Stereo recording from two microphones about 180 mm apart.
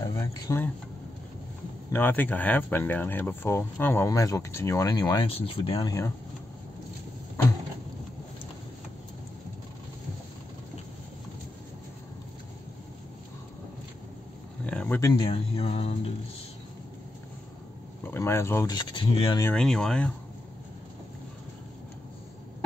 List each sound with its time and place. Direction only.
0.0 s a sound: 20° left (ahead or behind)
1.9 s speech: 10° left (ahead or behind); by 5.9 s 30° left (ahead or behind)
5.9 s speech: 20° left (ahead or behind)
14.7 s a sound: 5° left (ahead or behind)
15.0 s speech: 20° left (ahead or behind)
15.2 s speech: 30° left (ahead or behind)
18.0 s speech: 15° left (ahead or behind)
19.4 s speech: 5° left (ahead or behind)